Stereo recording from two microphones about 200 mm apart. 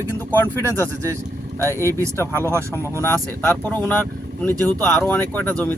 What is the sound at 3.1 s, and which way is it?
Speech, 5° left (ahead or behind).